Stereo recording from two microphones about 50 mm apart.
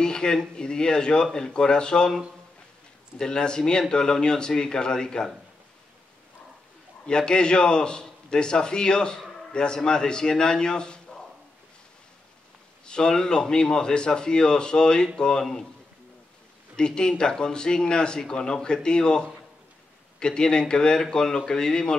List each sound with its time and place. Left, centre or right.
0.0 s a man's voice: centre
3.2 s a man's voice: centre
7.1 s a man's voice: centre
12.8 s a man's voice: centre
16.7 s a man's voice: centre